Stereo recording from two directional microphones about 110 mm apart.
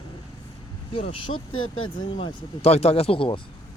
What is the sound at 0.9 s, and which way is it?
Speech, 55° left (ahead or behind).